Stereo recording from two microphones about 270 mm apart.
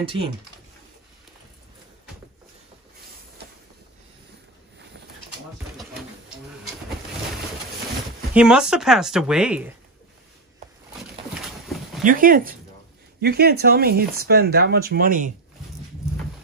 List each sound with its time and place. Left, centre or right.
0.0 s speech: centre
8.4 s speech: centre
12.0 s speech: right